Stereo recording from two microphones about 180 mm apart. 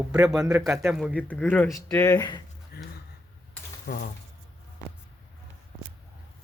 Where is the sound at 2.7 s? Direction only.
60° left (ahead or behind).